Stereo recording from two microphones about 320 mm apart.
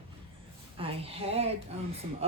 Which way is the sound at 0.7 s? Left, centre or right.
Centre.